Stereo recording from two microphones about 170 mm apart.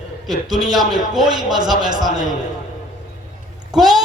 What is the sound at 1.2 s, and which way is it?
Speech, 25° right (ahead or behind).